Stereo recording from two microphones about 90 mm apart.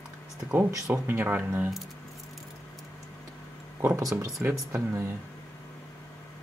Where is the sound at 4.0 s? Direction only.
40° right (ahead or behind).